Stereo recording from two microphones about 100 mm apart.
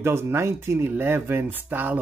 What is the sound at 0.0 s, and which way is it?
Speech, 25° right (ahead or behind).